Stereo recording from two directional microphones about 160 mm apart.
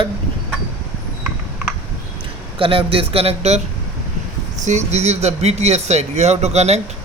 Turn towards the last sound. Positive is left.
turn(degrees=-45)  # may be behind; listen again after turning